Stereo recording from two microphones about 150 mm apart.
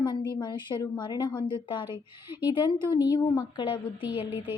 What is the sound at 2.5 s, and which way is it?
A woman's voice, 25° left (ahead or behind).